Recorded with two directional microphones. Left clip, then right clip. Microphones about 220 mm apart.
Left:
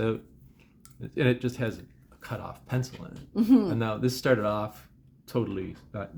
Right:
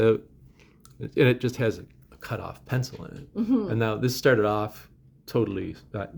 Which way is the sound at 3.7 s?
35° right (ahead or behind).